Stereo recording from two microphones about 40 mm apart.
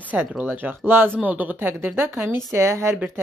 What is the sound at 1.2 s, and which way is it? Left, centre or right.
Speech, right.